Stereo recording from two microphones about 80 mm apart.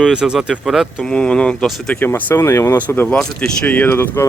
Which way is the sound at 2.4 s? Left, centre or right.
Left.